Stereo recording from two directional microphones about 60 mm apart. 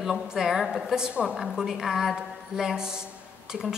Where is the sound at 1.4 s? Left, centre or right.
Centre.